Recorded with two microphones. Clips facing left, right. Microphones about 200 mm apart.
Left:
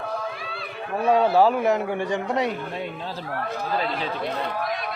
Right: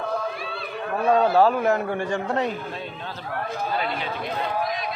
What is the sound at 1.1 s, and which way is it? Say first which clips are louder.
A man's voice: even; 15° left (ahead or behind).